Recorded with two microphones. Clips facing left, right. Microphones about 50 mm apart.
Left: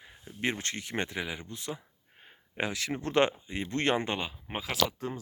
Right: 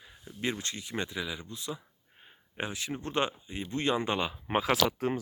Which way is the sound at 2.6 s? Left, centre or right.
Left.